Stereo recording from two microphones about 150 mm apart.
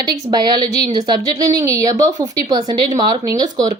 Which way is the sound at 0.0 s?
25° right (ahead or behind).